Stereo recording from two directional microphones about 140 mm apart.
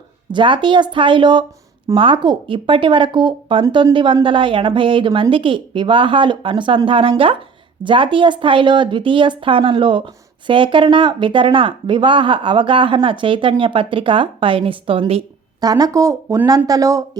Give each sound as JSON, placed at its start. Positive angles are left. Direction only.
{"t": 0.3, "sound": "a woman's voice", "side_deg": -35}
{"t": 15.6, "sound": "speech", "side_deg": -30}